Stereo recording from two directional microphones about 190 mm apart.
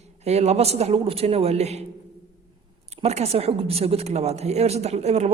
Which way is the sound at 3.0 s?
35° right (ahead or behind).